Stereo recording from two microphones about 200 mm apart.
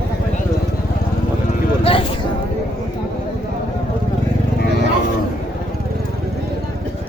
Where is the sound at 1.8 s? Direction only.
25° left (ahead or behind).